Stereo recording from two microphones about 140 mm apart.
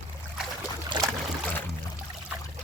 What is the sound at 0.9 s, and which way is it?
Boat, 30° right (ahead or behind).